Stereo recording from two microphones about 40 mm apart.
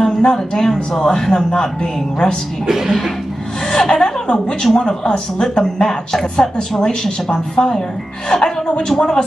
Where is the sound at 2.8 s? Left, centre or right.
Centre.